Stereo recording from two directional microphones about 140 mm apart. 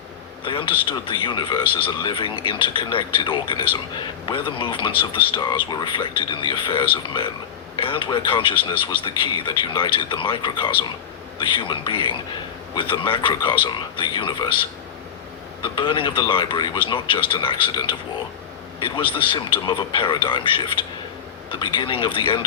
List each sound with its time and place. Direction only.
0.4 s a man's voice: 35° left (ahead or behind)
15.6 s a man's voice: 35° left (ahead or behind)